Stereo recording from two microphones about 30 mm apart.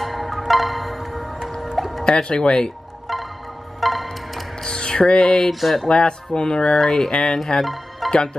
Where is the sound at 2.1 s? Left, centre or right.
Left.